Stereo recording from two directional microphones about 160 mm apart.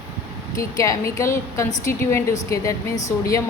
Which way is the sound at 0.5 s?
20° left (ahead or behind).